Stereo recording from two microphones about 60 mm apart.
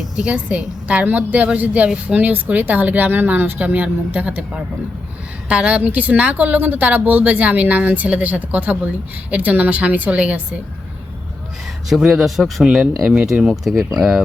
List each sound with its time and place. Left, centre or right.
0.0 s a woman's voice: centre
11.9 s speech: centre
13.7 s speech: centre